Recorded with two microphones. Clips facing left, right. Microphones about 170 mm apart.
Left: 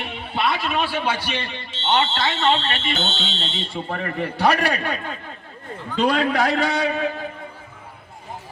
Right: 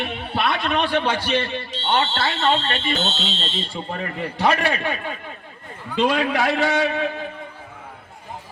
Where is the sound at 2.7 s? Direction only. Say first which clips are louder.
Right 2 dB; 35° right (ahead or behind).